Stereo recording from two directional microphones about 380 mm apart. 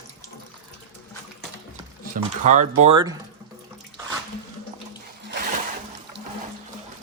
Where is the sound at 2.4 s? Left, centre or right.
Centre.